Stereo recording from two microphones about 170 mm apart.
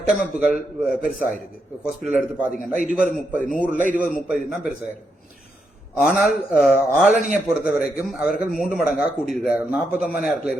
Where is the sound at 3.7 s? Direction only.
50° right (ahead or behind).